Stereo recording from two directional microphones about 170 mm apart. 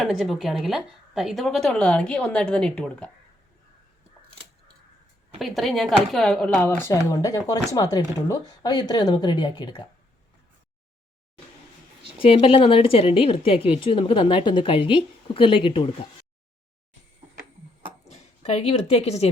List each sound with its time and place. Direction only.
0.0 s a woman's voice: centre (ahead or behind)
5.4 s a woman's voice: centre (ahead or behind)
7.1 s speech: 20° left (ahead or behind)
12.2 s a woman's voice: 35° left (ahead or behind)
18.1 s a woman's voice: 40° left (ahead or behind)